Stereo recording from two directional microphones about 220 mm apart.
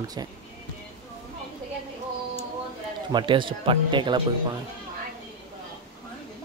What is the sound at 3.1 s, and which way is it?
Speech, 20° right (ahead or behind).